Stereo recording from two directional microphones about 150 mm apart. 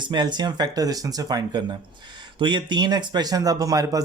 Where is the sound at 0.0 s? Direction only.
30° right (ahead or behind).